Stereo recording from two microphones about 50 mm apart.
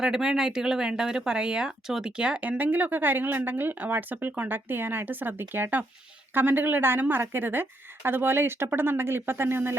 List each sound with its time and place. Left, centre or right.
0.0 s speech: centre
2.4 s speech: right